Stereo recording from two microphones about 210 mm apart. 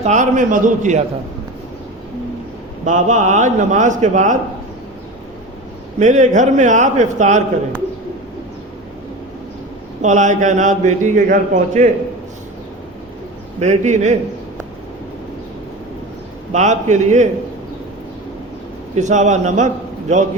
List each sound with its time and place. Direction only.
0.0 s a man's voice: 35° right (ahead or behind)
2.8 s a man's voice: 35° right (ahead or behind)
6.0 s a man's voice: 35° right (ahead or behind)
10.0 s a man's voice: 35° right (ahead or behind)
13.6 s a man's voice: 35° right (ahead or behind)
16.5 s a man's voice: 35° right (ahead or behind)
18.9 s a man's voice: 35° right (ahead or behind)